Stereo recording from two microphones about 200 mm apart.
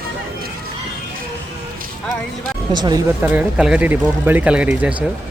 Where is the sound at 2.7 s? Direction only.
20° right (ahead or behind).